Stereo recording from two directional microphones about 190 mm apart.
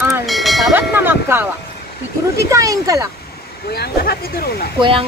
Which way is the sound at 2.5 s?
15° right (ahead or behind).